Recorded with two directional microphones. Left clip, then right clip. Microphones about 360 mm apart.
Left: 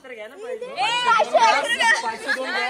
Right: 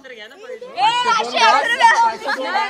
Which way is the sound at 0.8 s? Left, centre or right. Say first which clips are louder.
Right 7 dB; right.